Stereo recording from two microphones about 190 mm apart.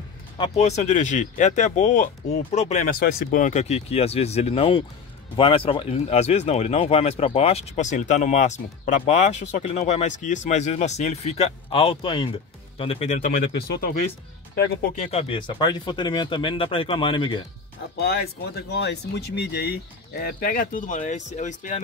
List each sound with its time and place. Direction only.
0.4 s speech: 35° left (ahead or behind)
15.0 s speech: 30° left (ahead or behind)
17.9 s speech: 55° left (ahead or behind)